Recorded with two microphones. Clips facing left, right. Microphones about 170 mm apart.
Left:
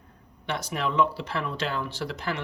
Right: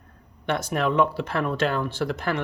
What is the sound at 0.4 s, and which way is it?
Speech, 50° right (ahead or behind).